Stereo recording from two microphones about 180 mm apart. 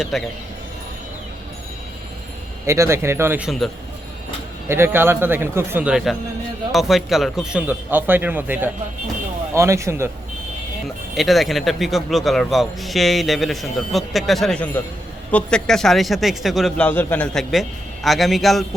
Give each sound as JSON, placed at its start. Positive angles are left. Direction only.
{"t": 0.0, "sound": "a man's voice", "side_deg": 0}
{"t": 2.6, "sound": "a man's voice", "side_deg": -15}
{"t": 4.7, "sound": "a man's voice", "side_deg": -15}
{"t": 11.1, "sound": "a man's voice", "side_deg": 0}